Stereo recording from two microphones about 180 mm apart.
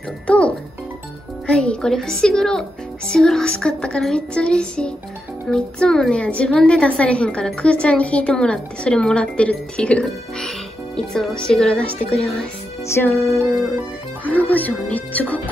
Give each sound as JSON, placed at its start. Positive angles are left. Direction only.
{"t": 0.3, "sound": "music", "side_deg": 5}
{"t": 1.5, "sound": "a woman's voice", "side_deg": 5}
{"t": 12.8, "sound": "music", "side_deg": 15}
{"t": 14.2, "sound": "speech", "side_deg": 10}